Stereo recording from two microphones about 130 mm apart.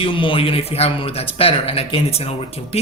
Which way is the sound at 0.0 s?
40° left (ahead or behind).